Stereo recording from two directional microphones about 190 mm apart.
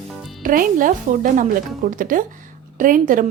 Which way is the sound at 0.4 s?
45° right (ahead or behind).